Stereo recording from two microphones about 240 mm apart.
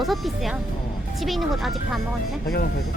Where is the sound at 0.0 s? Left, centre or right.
Centre.